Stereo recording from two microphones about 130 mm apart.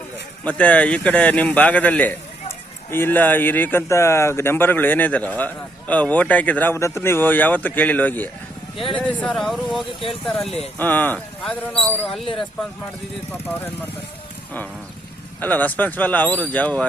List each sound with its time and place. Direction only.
0.4 s speech: 10° left (ahead or behind)
13.3 s speech: 15° left (ahead or behind)
15.4 s speech: 10° left (ahead or behind)